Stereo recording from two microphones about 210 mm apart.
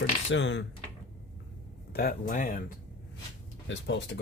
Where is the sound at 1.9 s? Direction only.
45° left (ahead or behind).